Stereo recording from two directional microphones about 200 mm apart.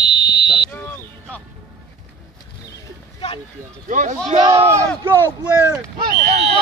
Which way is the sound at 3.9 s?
40° right (ahead or behind).